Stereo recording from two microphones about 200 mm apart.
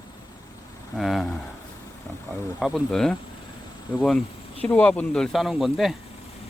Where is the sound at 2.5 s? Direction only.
Centre (ahead or behind).